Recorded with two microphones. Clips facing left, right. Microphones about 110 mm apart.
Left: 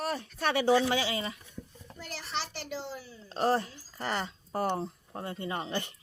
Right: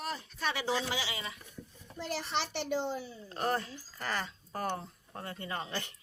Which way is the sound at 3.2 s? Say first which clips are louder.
Left 6 dB; 25° left (ahead or behind).